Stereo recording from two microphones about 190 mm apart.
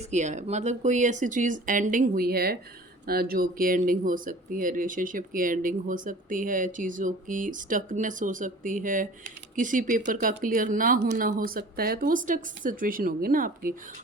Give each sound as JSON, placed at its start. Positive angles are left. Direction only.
{"t": 0.1, "sound": "speech", "side_deg": -40}